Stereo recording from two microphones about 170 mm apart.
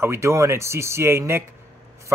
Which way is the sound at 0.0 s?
15° right (ahead or behind).